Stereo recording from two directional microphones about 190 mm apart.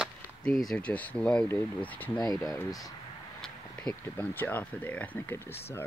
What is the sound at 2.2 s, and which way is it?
Speech, 20° left (ahead or behind).